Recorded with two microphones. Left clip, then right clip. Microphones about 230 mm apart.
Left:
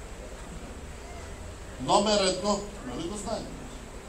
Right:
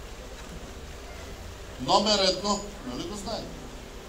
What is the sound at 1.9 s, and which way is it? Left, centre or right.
Speech, right.